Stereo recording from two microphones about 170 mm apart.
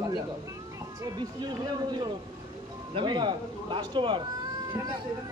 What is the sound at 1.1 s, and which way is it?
Speech, 25° right (ahead or behind).